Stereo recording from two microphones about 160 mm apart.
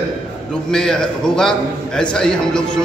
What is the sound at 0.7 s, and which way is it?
A man's voice, 5° left (ahead or behind).